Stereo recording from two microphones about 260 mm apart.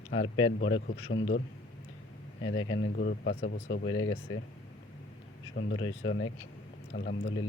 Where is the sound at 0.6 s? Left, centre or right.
Left.